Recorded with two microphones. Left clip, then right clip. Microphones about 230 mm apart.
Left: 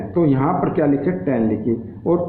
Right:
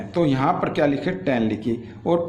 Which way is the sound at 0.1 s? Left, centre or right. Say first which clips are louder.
Left 2 dB; right.